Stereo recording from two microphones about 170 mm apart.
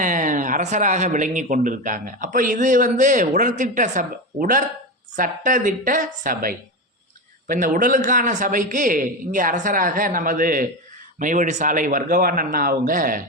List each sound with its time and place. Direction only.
0.0 s a man's voice: 50° right (ahead or behind)